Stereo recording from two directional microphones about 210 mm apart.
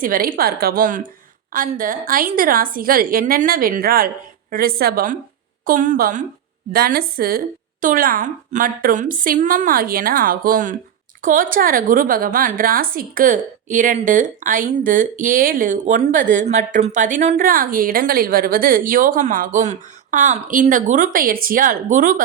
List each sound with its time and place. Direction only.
0.0 s a woman's voice: 40° right (ahead or behind)